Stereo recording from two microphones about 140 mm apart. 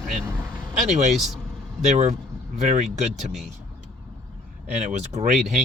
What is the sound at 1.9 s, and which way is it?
Speech, 55° right (ahead or behind).